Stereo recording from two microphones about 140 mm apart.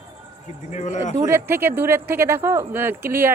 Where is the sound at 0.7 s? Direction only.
60° left (ahead or behind).